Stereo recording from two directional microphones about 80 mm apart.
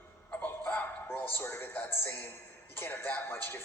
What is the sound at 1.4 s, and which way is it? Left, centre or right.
Speech, left.